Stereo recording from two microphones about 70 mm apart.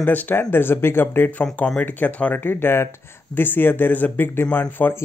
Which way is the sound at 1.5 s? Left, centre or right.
Centre.